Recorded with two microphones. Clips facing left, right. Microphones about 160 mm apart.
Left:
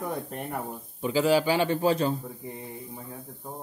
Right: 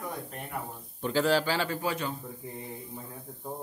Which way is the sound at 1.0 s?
5° left (ahead or behind).